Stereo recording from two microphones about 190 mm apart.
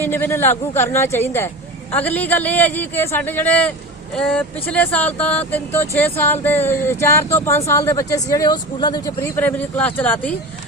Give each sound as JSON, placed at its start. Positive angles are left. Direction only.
{"t": 0.0, "sound": "speech", "side_deg": 10}